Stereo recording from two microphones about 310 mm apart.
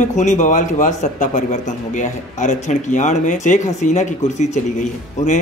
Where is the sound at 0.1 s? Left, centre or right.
Left.